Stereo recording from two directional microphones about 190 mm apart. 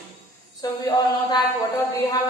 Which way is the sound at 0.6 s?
20° left (ahead or behind).